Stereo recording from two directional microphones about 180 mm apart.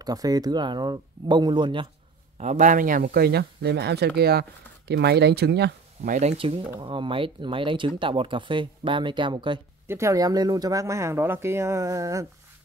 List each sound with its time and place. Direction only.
0.0 s speech: 20° right (ahead or behind)
2.3 s speech: 40° right (ahead or behind); by 6.1 s 65° right (ahead or behind)
6.1 s speech: 35° right (ahead or behind)
9.8 s speech: 15° right (ahead or behind)